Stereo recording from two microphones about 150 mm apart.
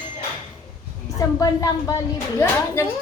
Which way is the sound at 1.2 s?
25° left (ahead or behind).